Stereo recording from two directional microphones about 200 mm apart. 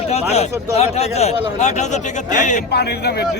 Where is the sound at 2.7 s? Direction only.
55° left (ahead or behind).